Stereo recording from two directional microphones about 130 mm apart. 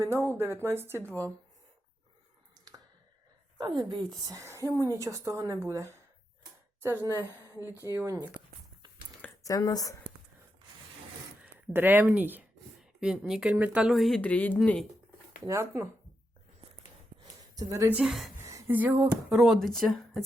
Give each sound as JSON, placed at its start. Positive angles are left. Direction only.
{"t": 0.0, "sound": "a woman's voice", "side_deg": -20}
{"t": 2.6, "sound": "a sound", "side_deg": -30}
{"t": 3.6, "sound": "a woman's voice", "side_deg": -35}
{"t": 7.2, "sound": "a woman's voice", "side_deg": -15}
{"t": 9.4, "sound": "speech", "side_deg": 25}
{"t": 11.7, "sound": "speech", "side_deg": -15}
{"t": 14.2, "sound": "speech", "side_deg": 10}
{"t": 15.4, "sound": "a woman's voice", "side_deg": -20}
{"t": 17.5, "sound": "speech", "side_deg": -30}
{"t": 17.9, "sound": "speech", "side_deg": 0}
{"t": 18.3, "sound": "a sound", "side_deg": -20}
{"t": 18.8, "sound": "speech", "side_deg": -15}
{"t": 19.3, "sound": "speech", "side_deg": 0}